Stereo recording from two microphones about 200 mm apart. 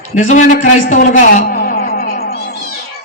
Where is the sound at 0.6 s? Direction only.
40° left (ahead or behind).